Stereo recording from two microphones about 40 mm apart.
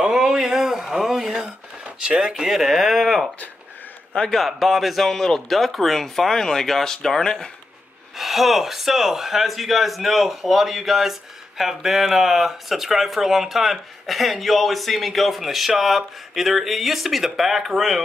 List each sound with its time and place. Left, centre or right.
0.0 s a sound: centre
2.0 s speech: centre
2.4 s speech: centre
4.5 s speech: centre
8.2 s speech: centre